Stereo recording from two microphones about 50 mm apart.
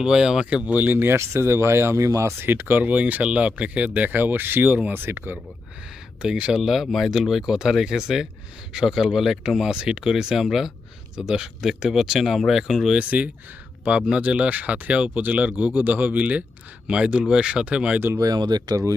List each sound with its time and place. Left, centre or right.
0.0 s speech: centre
0.5 s speech: right
1.1 s speech: right
2.4 s speech: right
6.2 s speech: centre
6.6 s speech: centre
12.9 s speech: right
16.8 s speech: right